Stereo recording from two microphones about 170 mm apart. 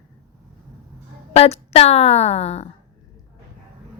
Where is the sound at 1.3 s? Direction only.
35° left (ahead or behind).